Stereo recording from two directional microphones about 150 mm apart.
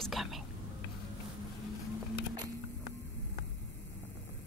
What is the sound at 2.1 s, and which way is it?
Music, 25° right (ahead or behind).